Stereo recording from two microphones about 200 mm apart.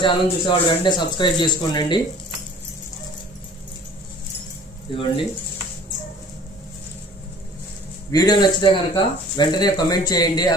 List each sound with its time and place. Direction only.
0.0 s speech: 25° left (ahead or behind)
8.1 s speech: 20° left (ahead or behind)